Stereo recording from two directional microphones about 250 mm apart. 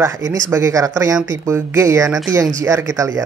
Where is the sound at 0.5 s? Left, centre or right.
Centre.